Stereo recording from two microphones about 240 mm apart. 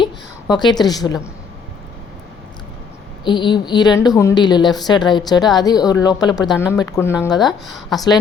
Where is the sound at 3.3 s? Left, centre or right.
Centre.